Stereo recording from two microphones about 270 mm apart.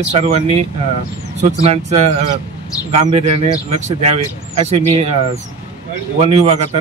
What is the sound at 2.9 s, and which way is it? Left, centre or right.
Speech, right.